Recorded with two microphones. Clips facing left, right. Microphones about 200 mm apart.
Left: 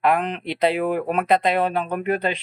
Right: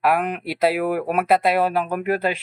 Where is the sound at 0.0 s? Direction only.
5° right (ahead or behind).